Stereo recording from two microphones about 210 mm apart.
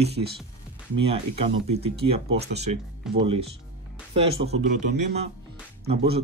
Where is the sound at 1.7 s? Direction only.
30° right (ahead or behind).